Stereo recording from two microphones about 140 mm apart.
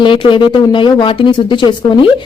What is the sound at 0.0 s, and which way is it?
Speech, 35° left (ahead or behind).